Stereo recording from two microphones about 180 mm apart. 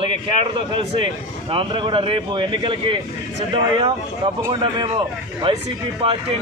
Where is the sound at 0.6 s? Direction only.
30° right (ahead or behind).